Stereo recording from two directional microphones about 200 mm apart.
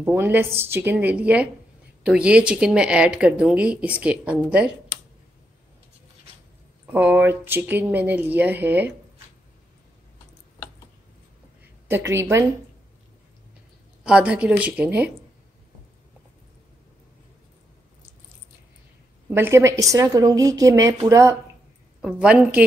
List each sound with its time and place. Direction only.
0.0 s speech: 10° right (ahead or behind)
6.9 s speech: 10° right (ahead or behind)
11.9 s speech: 15° right (ahead or behind)
14.0 s speech: 5° right (ahead or behind)
19.3 s speech: 10° right (ahead or behind)
22.0 s speech: 5° right (ahead or behind)